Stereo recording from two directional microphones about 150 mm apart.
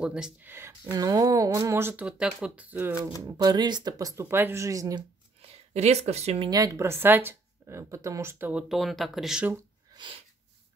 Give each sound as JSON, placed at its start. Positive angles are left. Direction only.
{"t": 0.0, "sound": "a woman's voice", "side_deg": -5}
{"t": 3.2, "sound": "speech", "side_deg": -25}
{"t": 5.4, "sound": "speech", "side_deg": -45}
{"t": 6.5, "sound": "a woman's voice", "side_deg": -20}